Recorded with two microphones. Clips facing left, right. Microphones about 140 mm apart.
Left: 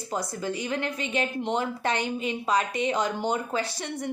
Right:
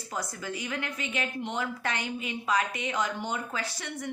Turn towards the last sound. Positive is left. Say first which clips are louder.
# left 6 dB
turn(degrees=30)  # may be behind; listen again after turning